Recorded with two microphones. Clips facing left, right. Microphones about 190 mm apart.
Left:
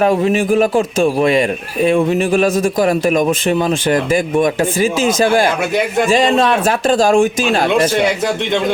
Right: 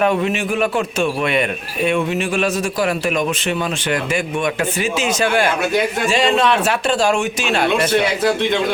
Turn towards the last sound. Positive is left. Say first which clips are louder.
# left 4 dB
turn(degrees=35)  # may be behind; listen again after turning